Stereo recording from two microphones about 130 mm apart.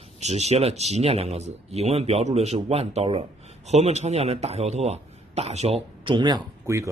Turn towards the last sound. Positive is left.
turn(degrees=-25)  # may be behind; listen again after turning